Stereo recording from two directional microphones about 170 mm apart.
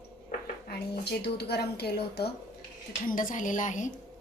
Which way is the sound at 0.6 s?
70° left (ahead or behind).